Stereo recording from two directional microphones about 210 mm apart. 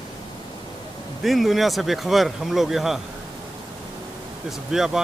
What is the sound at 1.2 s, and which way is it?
Speech, centre (ahead or behind).